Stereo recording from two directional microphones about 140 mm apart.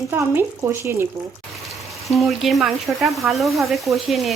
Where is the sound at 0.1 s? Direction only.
15° right (ahead or behind).